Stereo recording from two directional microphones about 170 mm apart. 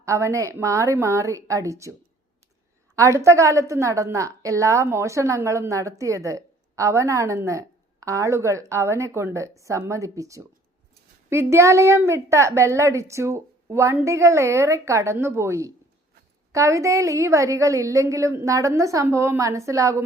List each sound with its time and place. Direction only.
0.0 s a woman's voice: 15° right (ahead or behind)